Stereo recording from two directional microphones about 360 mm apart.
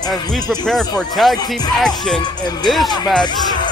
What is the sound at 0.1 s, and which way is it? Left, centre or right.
Speech, centre.